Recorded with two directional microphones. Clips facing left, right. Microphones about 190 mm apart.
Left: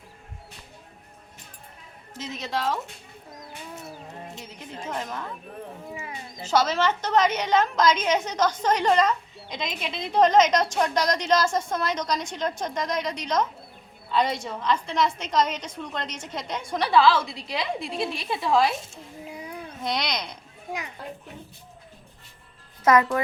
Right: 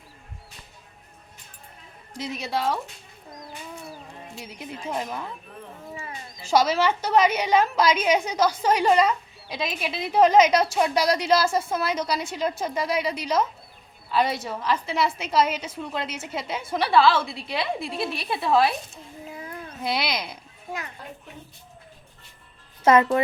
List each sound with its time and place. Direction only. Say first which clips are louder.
2.1 s a woman's voice: right 2 dB; 10° right (ahead or behind)
4.4 s a woman's voice: right 2 dB; 10° right (ahead or behind)
5.9 s wild animals: right 3 dB; 10° left (ahead or behind)
6.4 s a woman's voice: right 2 dB; 10° right (ahead or behind)
19.2 s a sound: even; 15° left (ahead or behind)
19.5 s a child's voice: right 1 dB; 5° right (ahead or behind)
20.7 s a child's voice: left 1 dB; 15° left (ahead or behind)
22.8 s speech: right 2 dB; 25° right (ahead or behind)